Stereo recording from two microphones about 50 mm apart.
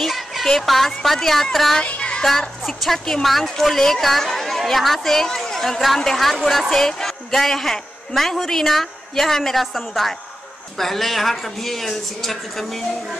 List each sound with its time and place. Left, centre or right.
0.0 s speech: centre
1.9 s child singing: left
2.2 s a woman's voice: centre